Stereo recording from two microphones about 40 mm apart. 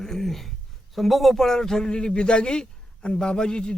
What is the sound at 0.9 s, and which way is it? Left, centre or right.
Speech, centre.